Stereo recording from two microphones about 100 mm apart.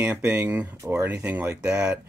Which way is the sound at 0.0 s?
15° right (ahead or behind).